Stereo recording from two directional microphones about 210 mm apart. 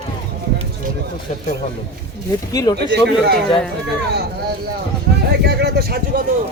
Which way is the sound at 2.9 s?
50° right (ahead or behind).